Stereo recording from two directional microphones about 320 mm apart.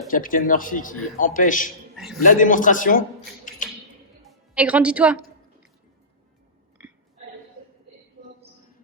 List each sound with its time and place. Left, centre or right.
0.1 s a man's voice: left
2.0 s a man's voice: centre
2.2 s a man's voice: left
4.3 s a woman's voice: centre
8.2 s a sound: right